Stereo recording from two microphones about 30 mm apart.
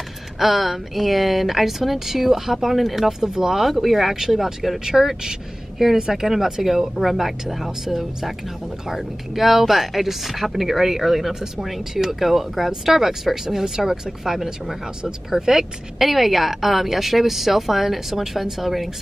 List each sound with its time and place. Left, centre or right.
0.4 s a woman's voice: centre
3.0 s speech: centre
6.2 s speech: centre
16.0 s a woman's voice: centre